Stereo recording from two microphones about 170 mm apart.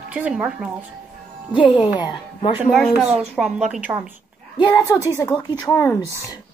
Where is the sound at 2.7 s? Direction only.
Centre (ahead or behind).